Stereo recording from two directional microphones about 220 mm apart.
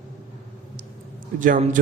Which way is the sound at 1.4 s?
35° right (ahead or behind).